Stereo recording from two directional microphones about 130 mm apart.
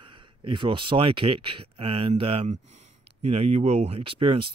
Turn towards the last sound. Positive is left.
turn(degrees=-45)  # may be behind; listen again after turning